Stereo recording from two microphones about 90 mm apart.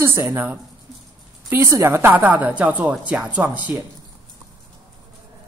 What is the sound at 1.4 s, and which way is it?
Speech, 35° right (ahead or behind).